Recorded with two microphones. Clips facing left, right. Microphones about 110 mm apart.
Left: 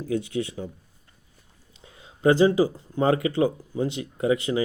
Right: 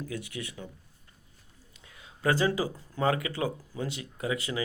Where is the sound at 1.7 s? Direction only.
30° left (ahead or behind).